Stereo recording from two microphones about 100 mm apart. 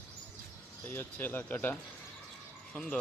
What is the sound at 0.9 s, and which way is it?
Speech, 20° left (ahead or behind).